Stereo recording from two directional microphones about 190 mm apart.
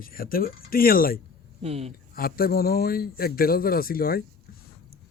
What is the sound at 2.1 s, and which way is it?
A man's voice, 50° left (ahead or behind).